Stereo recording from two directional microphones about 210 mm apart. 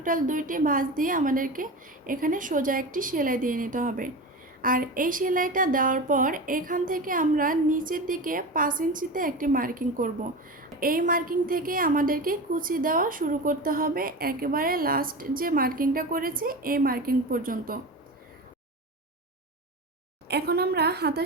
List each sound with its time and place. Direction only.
0.0 s a woman's voice: 40° right (ahead or behind)
20.2 s a woman's voice: 50° right (ahead or behind)